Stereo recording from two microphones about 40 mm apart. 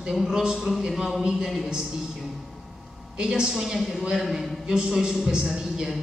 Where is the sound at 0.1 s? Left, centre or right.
Centre.